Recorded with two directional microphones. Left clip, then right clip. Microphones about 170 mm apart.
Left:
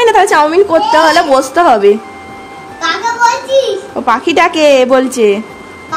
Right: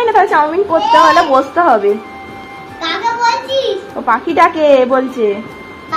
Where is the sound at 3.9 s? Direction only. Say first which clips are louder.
Left 2 dB; 90° left.